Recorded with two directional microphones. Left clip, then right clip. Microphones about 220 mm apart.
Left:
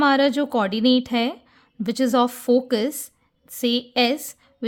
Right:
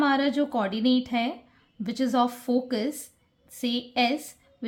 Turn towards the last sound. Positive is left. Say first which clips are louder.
# left 4 dB
turn(degrees=45)  # may be behind; listen again after turning